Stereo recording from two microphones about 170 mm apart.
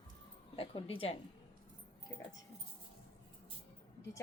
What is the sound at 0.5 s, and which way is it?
Speech, 30° left (ahead or behind).